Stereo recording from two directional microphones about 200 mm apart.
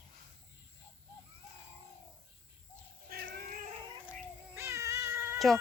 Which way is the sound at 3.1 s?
50° right (ahead or behind).